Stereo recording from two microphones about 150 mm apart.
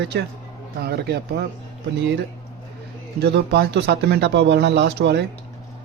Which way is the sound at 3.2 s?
90° right.